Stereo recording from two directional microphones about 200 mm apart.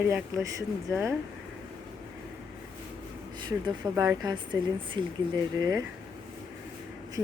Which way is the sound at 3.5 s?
15° right (ahead or behind).